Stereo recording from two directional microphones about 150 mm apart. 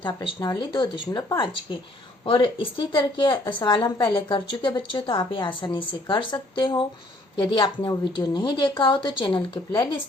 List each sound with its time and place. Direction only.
0.0 s a woman's voice: 25° left (ahead or behind)
2.2 s a woman's voice: 35° left (ahead or behind)